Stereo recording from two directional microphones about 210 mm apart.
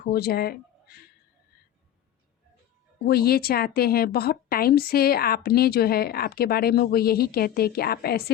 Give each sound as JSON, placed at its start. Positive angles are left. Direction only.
{"t": 0.0, "sound": "speech", "side_deg": 45}
{"t": 3.0, "sound": "speech", "side_deg": 45}